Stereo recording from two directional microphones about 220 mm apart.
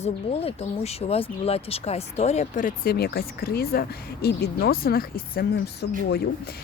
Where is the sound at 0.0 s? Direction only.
30° left (ahead or behind).